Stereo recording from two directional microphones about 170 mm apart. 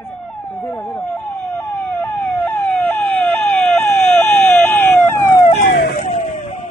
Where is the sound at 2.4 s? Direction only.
10° left (ahead or behind).